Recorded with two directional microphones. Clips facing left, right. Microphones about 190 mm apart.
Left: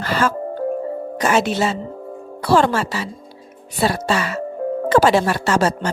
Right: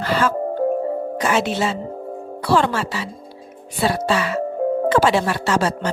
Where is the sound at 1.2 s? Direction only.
40° left (ahead or behind).